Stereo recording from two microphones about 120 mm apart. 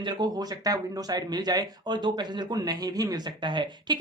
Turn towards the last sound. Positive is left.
turn(degrees=-40)  # may be behind; listen again after turning